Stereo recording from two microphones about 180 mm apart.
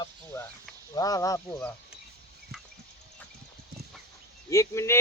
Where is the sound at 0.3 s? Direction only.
20° left (ahead or behind).